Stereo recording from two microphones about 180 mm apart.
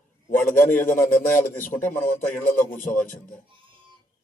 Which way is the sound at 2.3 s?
50° left (ahead or behind).